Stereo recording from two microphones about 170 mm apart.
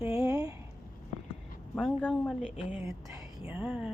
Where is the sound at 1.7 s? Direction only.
5° left (ahead or behind).